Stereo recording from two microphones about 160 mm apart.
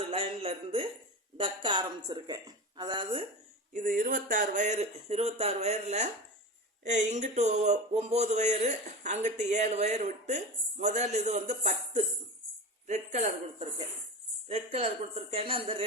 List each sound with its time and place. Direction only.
0.1 s music: 35° right (ahead or behind)
1.4 s a woman's voice: 30° right (ahead or behind)
3.7 s a woman's voice: 55° right (ahead or behind); by 15.8 s 35° right (ahead or behind)